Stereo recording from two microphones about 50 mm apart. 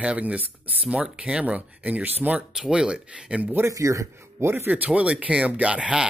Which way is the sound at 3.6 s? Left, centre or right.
Right.